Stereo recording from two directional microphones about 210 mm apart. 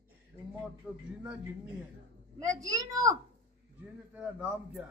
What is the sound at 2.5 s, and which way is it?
Speech, 15° right (ahead or behind).